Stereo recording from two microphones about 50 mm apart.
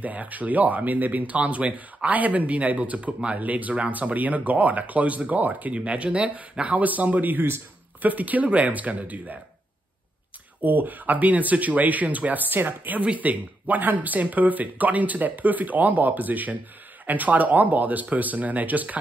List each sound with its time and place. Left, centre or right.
0.0 s speech: right
10.6 s speech: right